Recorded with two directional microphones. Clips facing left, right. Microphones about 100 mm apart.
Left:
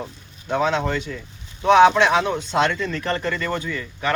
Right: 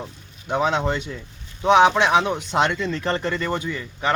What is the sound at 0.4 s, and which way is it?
Speech, 20° right (ahead or behind).